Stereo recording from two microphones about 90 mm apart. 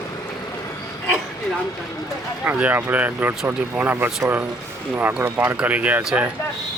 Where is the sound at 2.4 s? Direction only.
20° right (ahead or behind).